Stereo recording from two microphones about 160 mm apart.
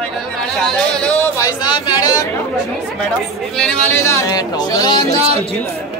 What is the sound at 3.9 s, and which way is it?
Speech, 20° left (ahead or behind).